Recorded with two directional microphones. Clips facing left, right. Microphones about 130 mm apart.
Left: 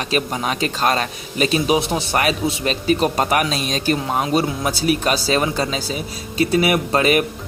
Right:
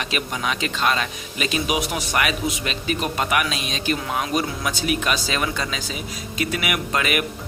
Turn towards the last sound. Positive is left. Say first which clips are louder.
# left 7 dB
turn(degrees=35)  # may be behind; listen again after turning